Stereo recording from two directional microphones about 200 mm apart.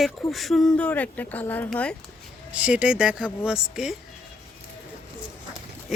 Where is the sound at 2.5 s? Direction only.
5° right (ahead or behind).